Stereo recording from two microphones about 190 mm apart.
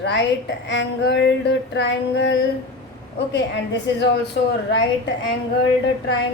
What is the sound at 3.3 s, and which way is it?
Speech, 65° left (ahead or behind).